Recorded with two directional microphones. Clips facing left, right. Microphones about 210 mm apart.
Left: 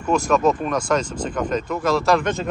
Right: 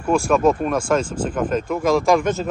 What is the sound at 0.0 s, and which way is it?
Speech, 10° right (ahead or behind).